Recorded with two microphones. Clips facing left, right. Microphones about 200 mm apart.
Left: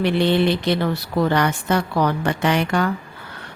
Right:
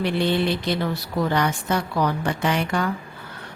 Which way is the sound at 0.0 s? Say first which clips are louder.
Left 4 dB; 70° left (ahead or behind).